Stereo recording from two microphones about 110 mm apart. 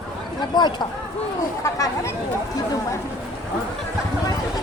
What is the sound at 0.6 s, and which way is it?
Speech, 40° left (ahead or behind).